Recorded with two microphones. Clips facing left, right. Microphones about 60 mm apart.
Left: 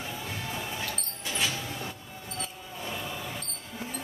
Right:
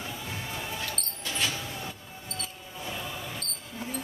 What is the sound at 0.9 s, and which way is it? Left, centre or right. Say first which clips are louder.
Squeak: even; centre.